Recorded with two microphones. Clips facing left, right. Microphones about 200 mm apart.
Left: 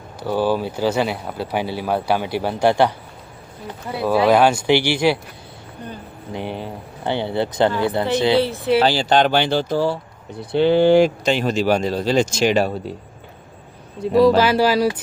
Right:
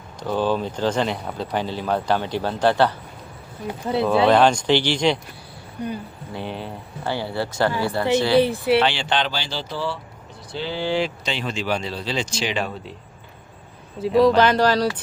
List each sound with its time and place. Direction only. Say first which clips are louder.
0.2 s speech: left 2 dB; 10° left (ahead or behind)
4.0 s speech: left 2 dB; 10° left (ahead or behind)
6.3 s speech: left 3 dB; 15° left (ahead or behind)
8.4 s speech: right 1 dB; 15° right (ahead or behind)
8.8 s speech: left 6 dB; 40° left (ahead or behind)
9.3 s speech: left 11 dB; 55° left (ahead or behind)
10.5 s speech: left 12 dB; 60° left (ahead or behind)
14.0 s speech: left 2 dB; centre (ahead or behind)